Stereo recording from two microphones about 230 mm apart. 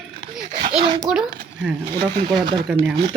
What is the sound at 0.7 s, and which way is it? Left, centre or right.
Speech, right.